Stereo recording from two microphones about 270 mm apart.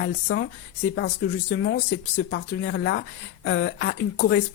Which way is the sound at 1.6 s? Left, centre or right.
Left.